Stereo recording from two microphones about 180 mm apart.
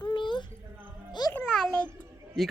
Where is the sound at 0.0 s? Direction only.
25° left (ahead or behind).